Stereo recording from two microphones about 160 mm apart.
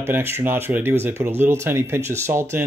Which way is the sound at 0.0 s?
15° right (ahead or behind).